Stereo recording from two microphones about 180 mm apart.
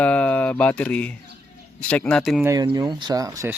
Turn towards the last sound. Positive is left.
turn(degrees=-20)  # may be behind; listen again after turning